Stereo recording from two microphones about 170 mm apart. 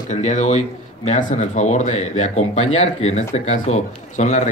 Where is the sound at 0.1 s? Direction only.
40° left (ahead or behind).